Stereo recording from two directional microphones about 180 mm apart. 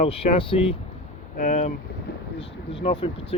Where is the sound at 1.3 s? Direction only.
40° left (ahead or behind).